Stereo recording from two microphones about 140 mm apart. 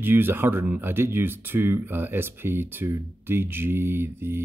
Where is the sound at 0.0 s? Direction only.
15° right (ahead or behind).